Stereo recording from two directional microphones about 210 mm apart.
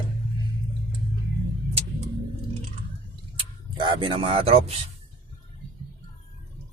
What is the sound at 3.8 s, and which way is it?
Speech, 25° right (ahead or behind).